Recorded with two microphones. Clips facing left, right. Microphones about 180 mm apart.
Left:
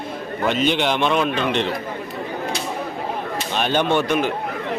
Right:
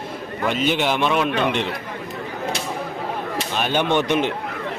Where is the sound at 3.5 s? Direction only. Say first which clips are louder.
Left 2 dB; 10° right (ahead or behind).